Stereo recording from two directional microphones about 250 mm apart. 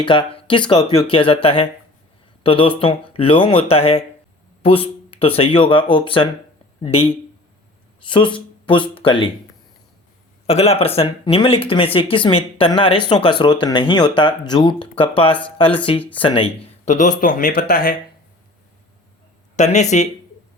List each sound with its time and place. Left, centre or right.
0.0 s speech: centre
4.6 s a sound: left
5.4 s speech: left
8.0 s speech: centre
10.4 s speech: left
19.5 s speech: left